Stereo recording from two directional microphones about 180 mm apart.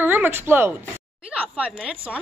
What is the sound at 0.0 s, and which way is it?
A woman's voice, 10° right (ahead or behind).